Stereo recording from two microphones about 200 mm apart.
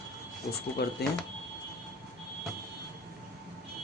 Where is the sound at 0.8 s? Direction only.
50° left (ahead or behind).